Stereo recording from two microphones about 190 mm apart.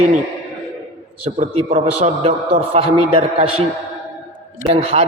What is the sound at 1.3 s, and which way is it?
A man's voice, 35° right (ahead or behind).